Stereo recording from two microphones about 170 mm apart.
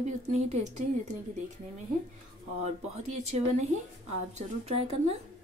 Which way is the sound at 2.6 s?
40° right (ahead or behind).